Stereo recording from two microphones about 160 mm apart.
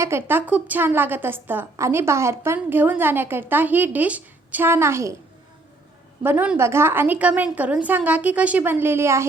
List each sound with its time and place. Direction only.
0.0 s a woman's voice: 15° right (ahead or behind)
6.2 s a woman's voice: 10° right (ahead or behind)